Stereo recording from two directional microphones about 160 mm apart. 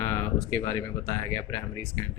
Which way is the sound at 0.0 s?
15° left (ahead or behind).